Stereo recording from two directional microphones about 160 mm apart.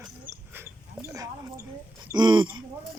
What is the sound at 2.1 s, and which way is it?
Speech, 30° right (ahead or behind).